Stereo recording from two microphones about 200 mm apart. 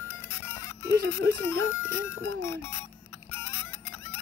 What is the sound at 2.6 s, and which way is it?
Music, 10° left (ahead or behind).